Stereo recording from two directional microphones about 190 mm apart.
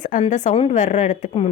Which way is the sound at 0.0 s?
40° left (ahead or behind).